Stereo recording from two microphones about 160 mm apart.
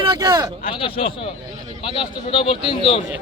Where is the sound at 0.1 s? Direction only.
25° right (ahead or behind).